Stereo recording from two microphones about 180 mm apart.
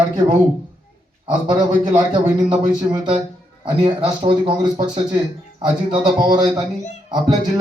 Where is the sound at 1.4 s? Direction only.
25° right (ahead or behind).